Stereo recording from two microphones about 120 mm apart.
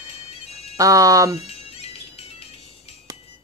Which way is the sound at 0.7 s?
30° right (ahead or behind).